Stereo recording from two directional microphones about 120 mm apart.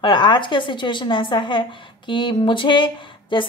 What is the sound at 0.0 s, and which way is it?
A woman's voice, 40° left (ahead or behind).